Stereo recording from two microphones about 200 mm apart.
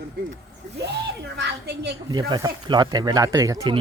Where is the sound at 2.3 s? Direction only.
20° right (ahead or behind).